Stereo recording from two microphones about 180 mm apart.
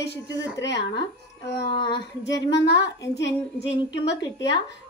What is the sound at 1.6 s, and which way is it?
Speech, 25° left (ahead or behind).